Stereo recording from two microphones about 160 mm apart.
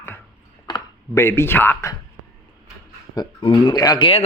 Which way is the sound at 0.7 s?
15° left (ahead or behind).